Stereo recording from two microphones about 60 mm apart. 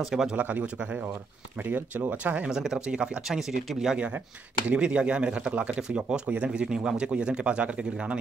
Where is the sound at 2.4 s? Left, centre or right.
Centre.